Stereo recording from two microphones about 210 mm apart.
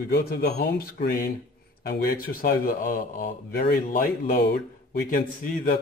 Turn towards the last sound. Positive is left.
turn(degrees=40)  # may be behind; listen again after turning